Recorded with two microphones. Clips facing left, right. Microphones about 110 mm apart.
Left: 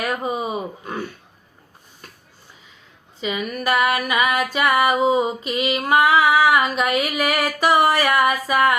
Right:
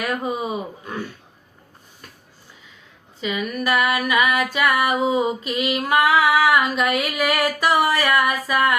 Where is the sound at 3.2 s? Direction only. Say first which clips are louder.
Even; 30° left (ahead or behind).